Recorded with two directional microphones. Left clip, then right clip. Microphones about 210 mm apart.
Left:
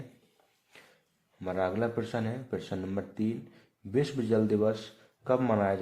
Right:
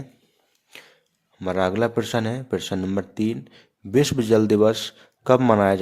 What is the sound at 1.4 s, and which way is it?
Speech, 40° right (ahead or behind).